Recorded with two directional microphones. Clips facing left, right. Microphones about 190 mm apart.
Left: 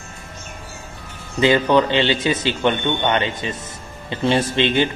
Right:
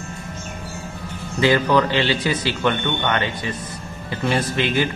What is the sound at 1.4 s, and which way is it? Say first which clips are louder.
A man's voice: left 2 dB; 20° left (ahead or behind).